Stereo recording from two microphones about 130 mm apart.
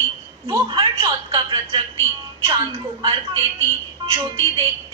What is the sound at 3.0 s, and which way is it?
A woman's voice, 45° right (ahead or behind).